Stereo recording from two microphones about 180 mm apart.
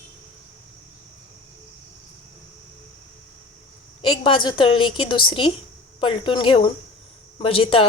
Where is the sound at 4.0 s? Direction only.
25° left (ahead or behind).